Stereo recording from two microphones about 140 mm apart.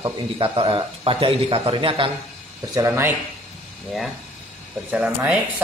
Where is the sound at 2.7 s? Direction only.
20° right (ahead or behind).